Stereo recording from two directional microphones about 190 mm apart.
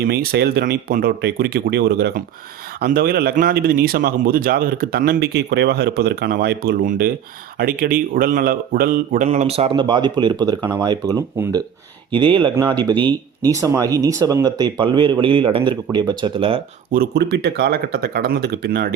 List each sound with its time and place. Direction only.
0.0 s speech: 55° right (ahead or behind); by 16.6 s 30° right (ahead or behind)
16.9 s speech: 55° right (ahead or behind)